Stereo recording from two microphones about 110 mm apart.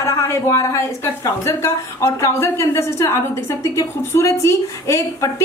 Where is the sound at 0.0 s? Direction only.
25° left (ahead or behind).